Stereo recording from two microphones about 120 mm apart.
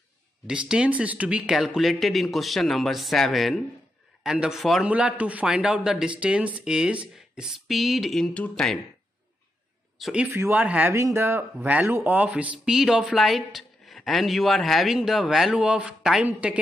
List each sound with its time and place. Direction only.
0.5 s speech: 5° right (ahead or behind)
9.9 s speech: centre (ahead or behind)
10.3 s speech: 15° right (ahead or behind)